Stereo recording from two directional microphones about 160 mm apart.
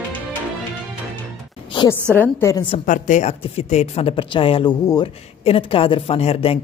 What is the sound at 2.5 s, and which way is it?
Speech, 35° left (ahead or behind).